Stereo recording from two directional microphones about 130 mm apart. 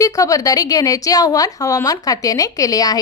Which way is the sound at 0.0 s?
25° left (ahead or behind).